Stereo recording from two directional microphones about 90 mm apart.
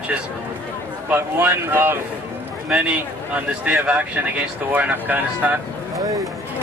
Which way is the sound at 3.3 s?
20° right (ahead or behind).